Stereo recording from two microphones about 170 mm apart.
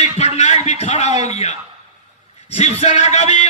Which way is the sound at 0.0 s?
40° left (ahead or behind).